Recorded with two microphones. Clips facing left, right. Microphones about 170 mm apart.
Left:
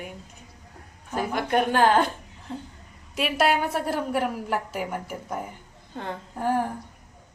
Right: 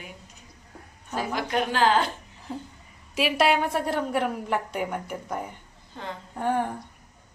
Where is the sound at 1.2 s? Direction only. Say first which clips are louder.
Left 3 dB; 55° left (ahead or behind).